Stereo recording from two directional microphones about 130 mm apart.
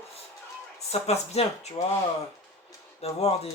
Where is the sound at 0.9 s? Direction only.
55° left (ahead or behind).